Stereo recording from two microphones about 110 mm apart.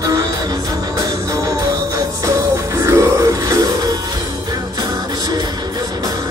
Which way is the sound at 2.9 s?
30° right (ahead or behind).